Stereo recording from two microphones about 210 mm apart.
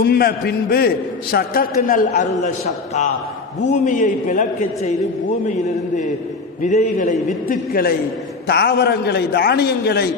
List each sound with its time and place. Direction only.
0.0 s a man's voice: 45° left (ahead or behind)
6.6 s a man's voice: 35° left (ahead or behind); by 10.1 s 50° left (ahead or behind)